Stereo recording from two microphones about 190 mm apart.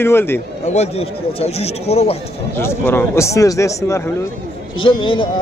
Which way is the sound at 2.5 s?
10° left (ahead or behind).